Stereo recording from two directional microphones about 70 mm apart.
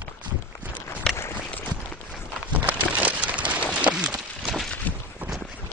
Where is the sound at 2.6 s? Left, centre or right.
Right.